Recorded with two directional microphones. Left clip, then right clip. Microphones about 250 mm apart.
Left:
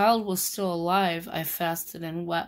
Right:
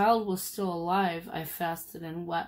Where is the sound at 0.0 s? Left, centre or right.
Left.